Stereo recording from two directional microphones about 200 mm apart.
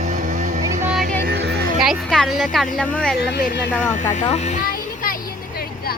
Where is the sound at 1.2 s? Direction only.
55° right (ahead or behind).